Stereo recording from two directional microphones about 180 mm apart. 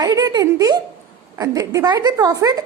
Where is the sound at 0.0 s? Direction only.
20° right (ahead or behind).